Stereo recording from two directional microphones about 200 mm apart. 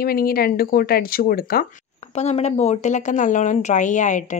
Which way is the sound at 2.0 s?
30° left (ahead or behind).